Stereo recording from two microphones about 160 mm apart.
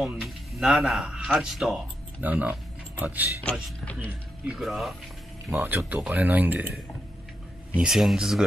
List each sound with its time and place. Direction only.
0.0 s speech: 5° right (ahead or behind)
4.6 s speech: centre (ahead or behind)
5.5 s speech: 10° right (ahead or behind)
7.7 s speech: 5° right (ahead or behind)